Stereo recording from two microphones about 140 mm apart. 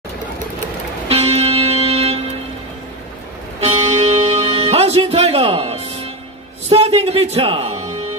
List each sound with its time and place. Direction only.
1.0 s music: 45° right (ahead or behind)
3.6 s music: 45° right (ahead or behind)
6.7 s speech: 45° right (ahead or behind)